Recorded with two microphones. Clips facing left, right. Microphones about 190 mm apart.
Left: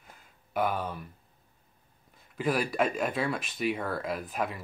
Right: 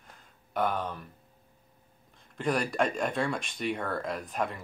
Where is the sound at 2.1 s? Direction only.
5° left (ahead or behind).